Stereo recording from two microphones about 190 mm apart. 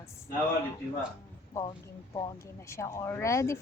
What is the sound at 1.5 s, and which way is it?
Speech, 15° left (ahead or behind).